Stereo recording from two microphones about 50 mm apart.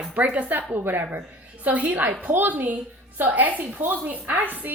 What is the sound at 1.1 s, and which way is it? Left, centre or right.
A woman's voice, right.